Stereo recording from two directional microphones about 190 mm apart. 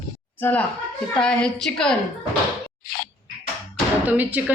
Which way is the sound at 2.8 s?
55° left (ahead or behind).